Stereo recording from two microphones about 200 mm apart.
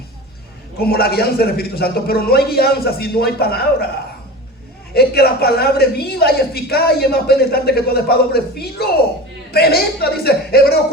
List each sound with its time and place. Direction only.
0.8 s speech: 50° left (ahead or behind)
4.9 s speech: 50° left (ahead or behind)